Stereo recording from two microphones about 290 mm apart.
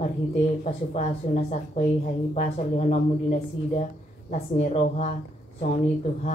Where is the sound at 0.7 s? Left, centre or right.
Left.